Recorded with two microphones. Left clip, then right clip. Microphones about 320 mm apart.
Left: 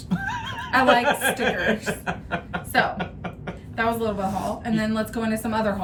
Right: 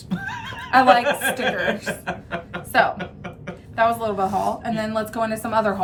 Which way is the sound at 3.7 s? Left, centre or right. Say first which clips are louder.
Right 4 dB; centre.